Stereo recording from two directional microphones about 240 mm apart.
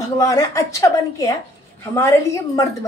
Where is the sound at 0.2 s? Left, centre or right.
Centre.